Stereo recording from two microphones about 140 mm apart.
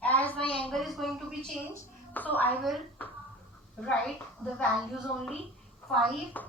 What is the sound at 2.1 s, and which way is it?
Speech, 10° left (ahead or behind).